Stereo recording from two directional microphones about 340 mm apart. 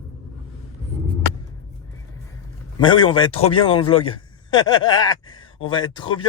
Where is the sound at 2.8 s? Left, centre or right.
Centre.